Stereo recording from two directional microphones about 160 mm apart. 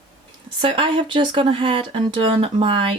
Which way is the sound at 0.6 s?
30° right (ahead or behind).